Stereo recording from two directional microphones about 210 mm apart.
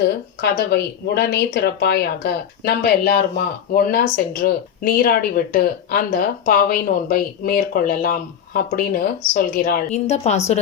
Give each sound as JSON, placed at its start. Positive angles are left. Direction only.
{"t": 0.4, "sound": "speech", "side_deg": 50}